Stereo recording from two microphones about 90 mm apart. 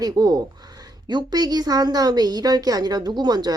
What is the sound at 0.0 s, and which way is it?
Speech, 45° right (ahead or behind).